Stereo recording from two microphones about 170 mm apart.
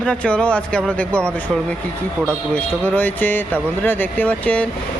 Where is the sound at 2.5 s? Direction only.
10° left (ahead or behind).